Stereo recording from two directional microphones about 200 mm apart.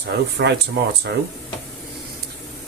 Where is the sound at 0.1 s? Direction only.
55° right (ahead or behind).